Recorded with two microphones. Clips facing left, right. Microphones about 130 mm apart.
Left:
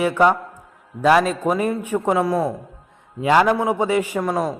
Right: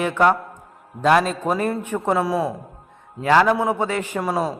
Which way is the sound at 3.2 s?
10° left (ahead or behind).